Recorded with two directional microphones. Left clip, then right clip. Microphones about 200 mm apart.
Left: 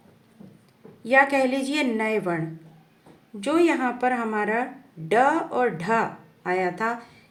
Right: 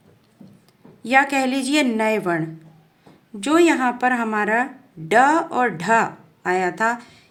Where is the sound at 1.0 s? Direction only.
40° right (ahead or behind).